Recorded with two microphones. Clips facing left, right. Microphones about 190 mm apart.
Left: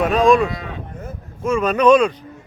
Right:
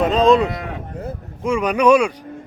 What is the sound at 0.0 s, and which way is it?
Speech, 20° right (ahead or behind).